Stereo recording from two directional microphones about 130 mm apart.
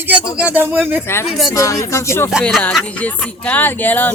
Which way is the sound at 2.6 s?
10° left (ahead or behind).